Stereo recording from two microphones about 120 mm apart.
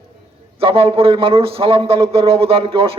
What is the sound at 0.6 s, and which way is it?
A man's voice, 50° right (ahead or behind).